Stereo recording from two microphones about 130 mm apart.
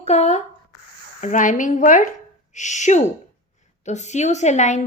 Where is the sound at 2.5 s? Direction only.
65° left (ahead or behind).